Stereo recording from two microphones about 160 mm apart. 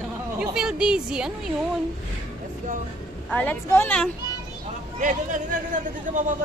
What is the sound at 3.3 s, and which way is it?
Speech, 10° left (ahead or behind).